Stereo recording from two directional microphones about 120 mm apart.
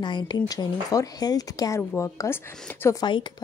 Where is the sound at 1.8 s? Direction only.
20° left (ahead or behind).